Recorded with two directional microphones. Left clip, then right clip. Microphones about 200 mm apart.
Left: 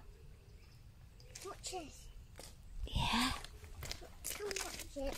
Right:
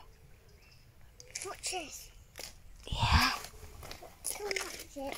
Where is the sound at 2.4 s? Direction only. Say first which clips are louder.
Right 9 dB; 50° right (ahead or behind).